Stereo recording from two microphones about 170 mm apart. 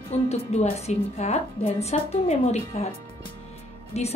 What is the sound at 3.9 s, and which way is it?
Speech, 40° left (ahead or behind).